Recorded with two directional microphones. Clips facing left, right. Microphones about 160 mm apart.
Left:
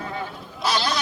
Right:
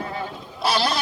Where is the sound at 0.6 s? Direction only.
30° right (ahead or behind).